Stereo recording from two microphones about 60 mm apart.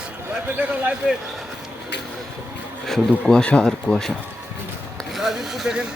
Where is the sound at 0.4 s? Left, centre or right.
Right.